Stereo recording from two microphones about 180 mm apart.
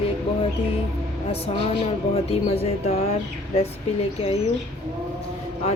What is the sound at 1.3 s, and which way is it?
Speech, 35° left (ahead or behind).